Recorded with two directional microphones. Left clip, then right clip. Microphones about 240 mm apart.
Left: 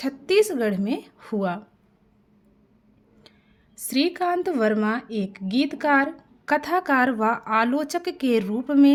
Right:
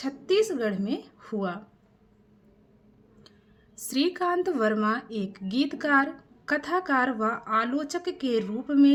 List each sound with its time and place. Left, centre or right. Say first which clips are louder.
0.0 s speech: left 4 dB; left
3.8 s speech: left 3 dB; left